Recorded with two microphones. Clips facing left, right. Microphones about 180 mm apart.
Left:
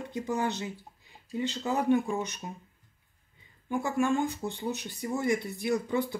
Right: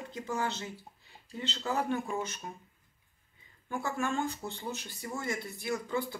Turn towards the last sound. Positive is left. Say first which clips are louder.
# left 5 dB
turn(degrees=20)  # may be behind; listen again after turning